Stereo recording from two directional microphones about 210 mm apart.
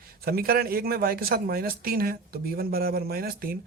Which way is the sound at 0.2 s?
45° right (ahead or behind).